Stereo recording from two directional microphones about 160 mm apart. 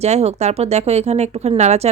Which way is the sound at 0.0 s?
40° right (ahead or behind).